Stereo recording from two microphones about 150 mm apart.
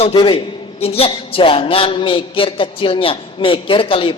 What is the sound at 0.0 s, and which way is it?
A man's voice, 35° left (ahead or behind).